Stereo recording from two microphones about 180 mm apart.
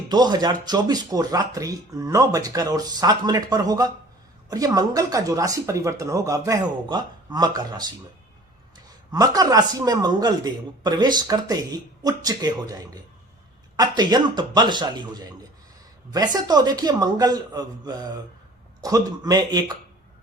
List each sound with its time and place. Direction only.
0.1 s speech: 20° right (ahead or behind)
9.1 s speech: 20° right (ahead or behind)